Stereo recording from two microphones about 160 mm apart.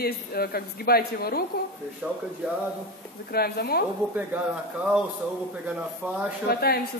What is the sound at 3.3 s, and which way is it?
Speech, 75° left (ahead or behind).